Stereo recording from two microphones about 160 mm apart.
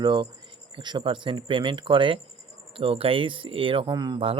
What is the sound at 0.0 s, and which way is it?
Speech, 30° right (ahead or behind).